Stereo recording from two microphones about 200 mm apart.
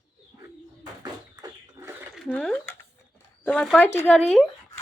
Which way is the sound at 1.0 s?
20° right (ahead or behind).